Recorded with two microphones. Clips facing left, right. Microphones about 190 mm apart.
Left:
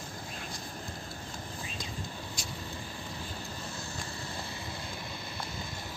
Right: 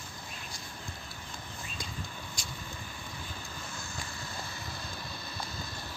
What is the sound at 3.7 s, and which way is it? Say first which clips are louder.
Vehicle: left 2 dB; 35° left (ahead or behind).